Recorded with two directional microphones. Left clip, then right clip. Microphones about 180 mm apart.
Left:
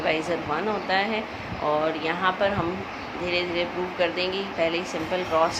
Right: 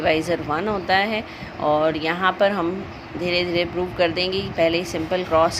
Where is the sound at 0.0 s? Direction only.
50° right (ahead or behind).